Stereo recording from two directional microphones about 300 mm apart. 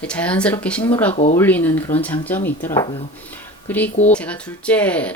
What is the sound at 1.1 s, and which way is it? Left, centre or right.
Speech, left.